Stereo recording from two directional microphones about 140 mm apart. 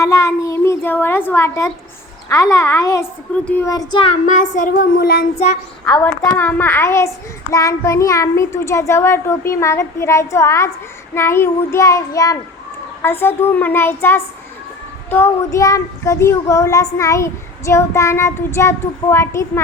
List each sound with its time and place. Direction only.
0.0 s a child's voice: 20° left (ahead or behind)
3.7 s a child's voice: 25° left (ahead or behind)
4.3 s speech: 65° left (ahead or behind); by 5.2 s 90° left
6.1 s a child's voice: 15° left (ahead or behind)